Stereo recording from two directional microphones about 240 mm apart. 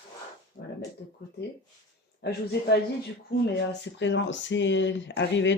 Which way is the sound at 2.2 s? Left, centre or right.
Left.